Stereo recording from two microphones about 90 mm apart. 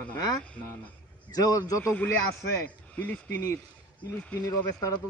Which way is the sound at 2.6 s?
20° left (ahead or behind).